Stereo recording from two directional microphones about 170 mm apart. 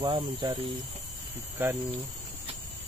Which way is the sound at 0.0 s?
30° right (ahead or behind).